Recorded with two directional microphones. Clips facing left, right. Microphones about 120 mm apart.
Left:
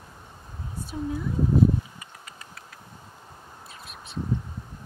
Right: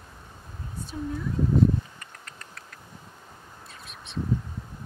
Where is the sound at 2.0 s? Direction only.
5° left (ahead or behind).